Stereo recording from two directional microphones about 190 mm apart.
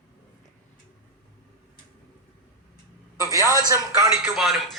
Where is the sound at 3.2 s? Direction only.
15° right (ahead or behind).